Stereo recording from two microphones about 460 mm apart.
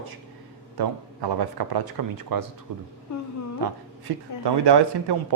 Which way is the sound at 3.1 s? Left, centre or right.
Left.